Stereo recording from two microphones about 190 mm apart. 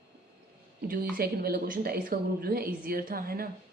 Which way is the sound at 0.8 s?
50° right (ahead or behind).